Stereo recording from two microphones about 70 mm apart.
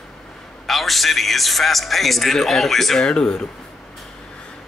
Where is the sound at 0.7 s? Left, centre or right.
Centre.